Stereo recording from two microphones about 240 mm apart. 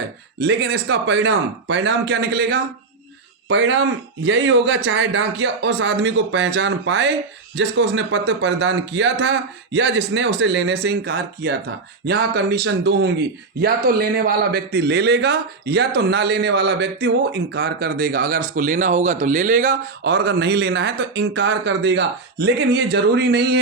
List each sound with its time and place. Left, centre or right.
0.3 s a man's voice: right